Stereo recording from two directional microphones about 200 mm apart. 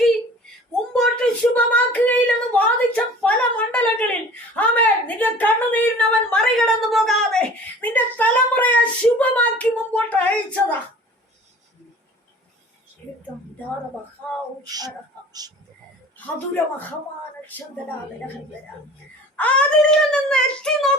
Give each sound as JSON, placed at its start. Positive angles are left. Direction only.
{"t": 0.7, "sound": "a sound", "side_deg": 5}
{"t": 14.7, "sound": "a man's voice", "side_deg": -20}
{"t": 17.5, "sound": "a woman's voice", "side_deg": 10}
{"t": 19.4, "sound": "speech", "side_deg": 5}